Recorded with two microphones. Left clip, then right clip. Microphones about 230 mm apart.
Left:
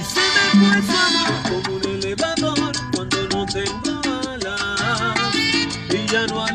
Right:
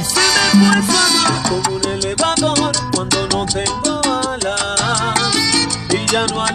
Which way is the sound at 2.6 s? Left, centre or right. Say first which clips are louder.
Right 5 dB; right.